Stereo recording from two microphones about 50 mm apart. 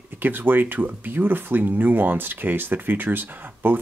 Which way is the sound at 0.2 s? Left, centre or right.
Right.